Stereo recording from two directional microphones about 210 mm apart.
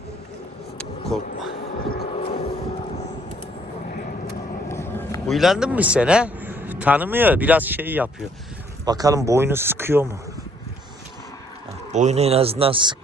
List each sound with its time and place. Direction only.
0.8 s vehicle: centre (ahead or behind)
2.0 s vehicle: 30° left (ahead or behind)
4.7 s a sound: 10° left (ahead or behind)
5.3 s a man's voice: centre (ahead or behind)
11.9 s speech: 35° right (ahead or behind)